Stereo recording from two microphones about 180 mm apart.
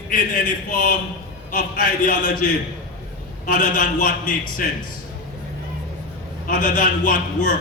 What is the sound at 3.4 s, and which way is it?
A man's voice, 50° left (ahead or behind).